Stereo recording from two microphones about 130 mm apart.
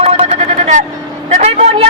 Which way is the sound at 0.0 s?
60° right (ahead or behind).